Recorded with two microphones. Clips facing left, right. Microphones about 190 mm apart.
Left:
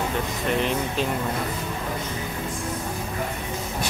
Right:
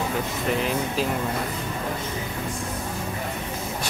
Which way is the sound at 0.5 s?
Centre (ahead or behind).